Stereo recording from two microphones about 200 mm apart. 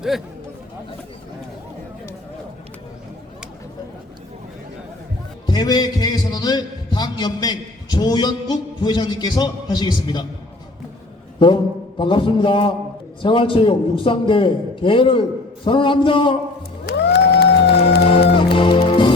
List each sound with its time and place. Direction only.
5.5 s a man's voice: 20° left (ahead or behind)
11.3 s a man's voice: 25° left (ahead or behind)
16.8 s music: 55° left (ahead or behind)
18.5 s music: 25° left (ahead or behind)